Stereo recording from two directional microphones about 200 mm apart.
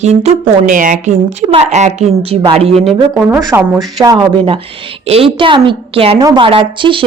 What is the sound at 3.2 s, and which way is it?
Speech, 10° right (ahead or behind).